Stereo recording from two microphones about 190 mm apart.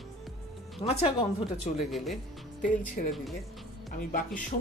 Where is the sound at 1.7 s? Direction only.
Centre (ahead or behind).